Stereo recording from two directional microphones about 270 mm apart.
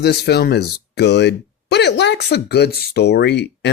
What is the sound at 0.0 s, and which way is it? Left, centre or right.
Speech, left.